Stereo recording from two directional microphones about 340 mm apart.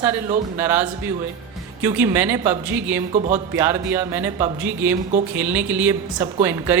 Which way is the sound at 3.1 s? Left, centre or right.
Centre.